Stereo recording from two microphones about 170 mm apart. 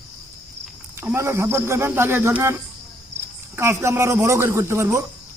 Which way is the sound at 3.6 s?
15° right (ahead or behind).